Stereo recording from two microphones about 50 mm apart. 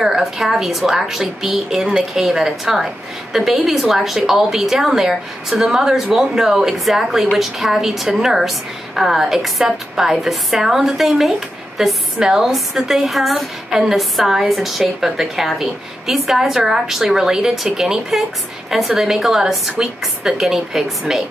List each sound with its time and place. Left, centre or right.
0.0 s a woman's voice: centre